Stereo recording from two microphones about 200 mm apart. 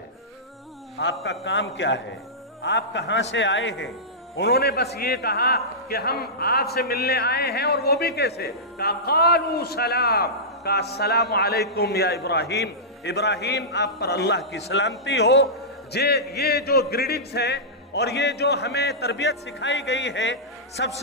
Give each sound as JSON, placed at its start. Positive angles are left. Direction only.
{"t": 0.9, "sound": "speech", "side_deg": 60}
{"t": 4.4, "sound": "a man's voice", "side_deg": 55}